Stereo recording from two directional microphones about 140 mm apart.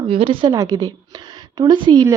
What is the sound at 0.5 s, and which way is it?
A woman's voice, 25° right (ahead or behind).